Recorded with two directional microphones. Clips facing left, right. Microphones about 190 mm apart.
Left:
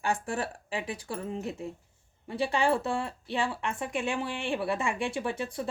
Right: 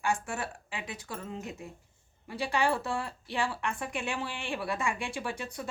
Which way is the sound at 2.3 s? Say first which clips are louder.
Left 3 dB; 25° left (ahead or behind).